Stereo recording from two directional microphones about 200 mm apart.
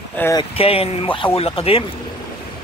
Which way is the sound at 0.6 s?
30° left (ahead or behind).